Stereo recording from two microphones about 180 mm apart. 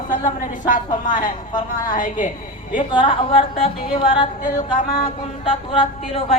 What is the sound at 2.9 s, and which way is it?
Speech, 30° left (ahead or behind).